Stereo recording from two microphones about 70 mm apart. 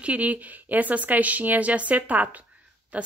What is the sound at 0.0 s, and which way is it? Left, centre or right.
A woman's voice, right.